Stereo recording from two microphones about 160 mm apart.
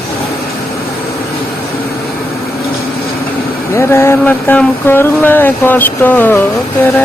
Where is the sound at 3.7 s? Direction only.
15° left (ahead or behind).